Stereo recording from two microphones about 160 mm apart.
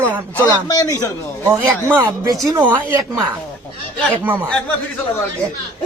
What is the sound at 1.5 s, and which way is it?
Speech, 15° right (ahead or behind).